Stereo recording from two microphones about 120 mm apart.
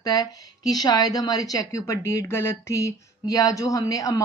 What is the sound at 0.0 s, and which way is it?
Speech, 30° left (ahead or behind).